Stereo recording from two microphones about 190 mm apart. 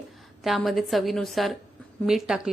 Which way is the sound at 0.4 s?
Centre (ahead or behind).